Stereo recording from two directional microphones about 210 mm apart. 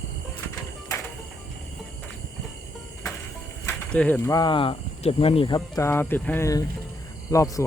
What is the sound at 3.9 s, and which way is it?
Speech, 5° left (ahead or behind).